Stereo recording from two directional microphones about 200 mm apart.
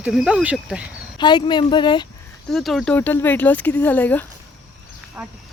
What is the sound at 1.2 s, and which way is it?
Speech, 20° left (ahead or behind).